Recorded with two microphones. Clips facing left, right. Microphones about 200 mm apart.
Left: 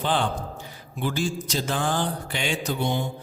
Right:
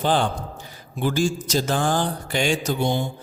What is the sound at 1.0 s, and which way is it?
Mantra, 45° right (ahead or behind).